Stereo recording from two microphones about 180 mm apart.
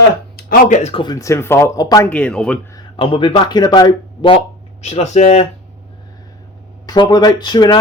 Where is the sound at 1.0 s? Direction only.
20° left (ahead or behind).